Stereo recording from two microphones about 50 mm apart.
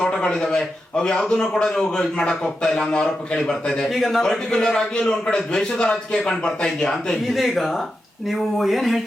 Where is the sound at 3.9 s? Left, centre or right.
Centre.